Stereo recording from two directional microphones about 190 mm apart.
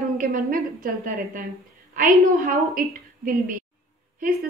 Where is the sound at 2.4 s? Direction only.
50° right (ahead or behind).